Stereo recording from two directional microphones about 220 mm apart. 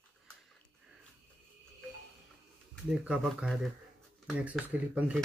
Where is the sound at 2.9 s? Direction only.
5° right (ahead or behind).